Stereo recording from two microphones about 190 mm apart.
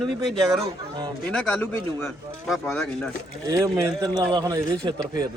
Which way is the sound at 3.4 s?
20° right (ahead or behind).